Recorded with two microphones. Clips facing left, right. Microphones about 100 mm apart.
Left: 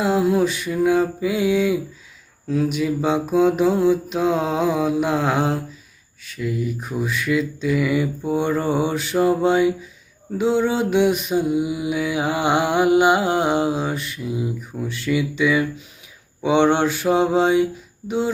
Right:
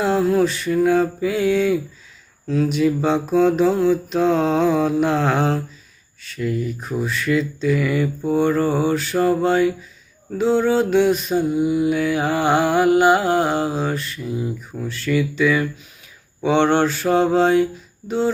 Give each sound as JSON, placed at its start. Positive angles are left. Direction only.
{"t": 0.0, "sound": "mantra", "side_deg": 10}